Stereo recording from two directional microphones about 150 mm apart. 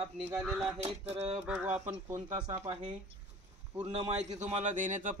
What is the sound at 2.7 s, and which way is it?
Speech, 35° right (ahead or behind).